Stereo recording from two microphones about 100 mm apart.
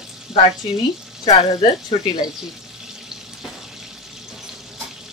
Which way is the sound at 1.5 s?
40° left (ahead or behind).